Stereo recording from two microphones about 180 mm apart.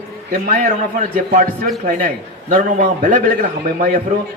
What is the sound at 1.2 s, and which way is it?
A man's voice, 50° right (ahead or behind).